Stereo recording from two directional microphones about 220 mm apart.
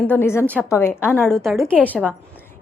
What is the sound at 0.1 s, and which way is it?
A woman's voice, 10° left (ahead or behind).